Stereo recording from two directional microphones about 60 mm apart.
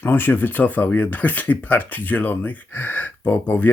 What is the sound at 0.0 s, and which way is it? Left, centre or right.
Speech, left.